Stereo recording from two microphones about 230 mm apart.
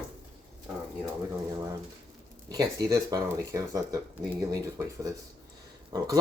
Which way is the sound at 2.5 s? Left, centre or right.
Centre.